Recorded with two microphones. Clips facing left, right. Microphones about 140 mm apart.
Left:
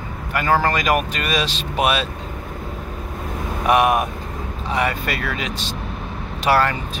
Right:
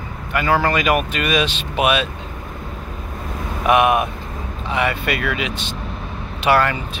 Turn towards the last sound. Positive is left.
turn(degrees=40)  # may be behind; listen again after turning